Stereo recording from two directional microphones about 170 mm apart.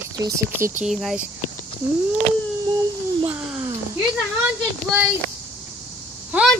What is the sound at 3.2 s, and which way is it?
Speech, 10° right (ahead or behind).